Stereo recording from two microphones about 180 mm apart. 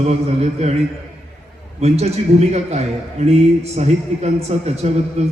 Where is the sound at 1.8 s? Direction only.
35° right (ahead or behind).